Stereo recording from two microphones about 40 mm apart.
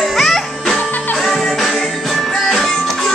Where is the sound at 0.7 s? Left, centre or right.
Left.